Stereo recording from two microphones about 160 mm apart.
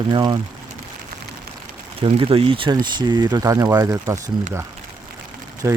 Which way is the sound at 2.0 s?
35° right (ahead or behind).